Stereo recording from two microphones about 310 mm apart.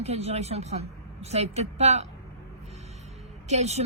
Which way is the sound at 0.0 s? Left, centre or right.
Centre.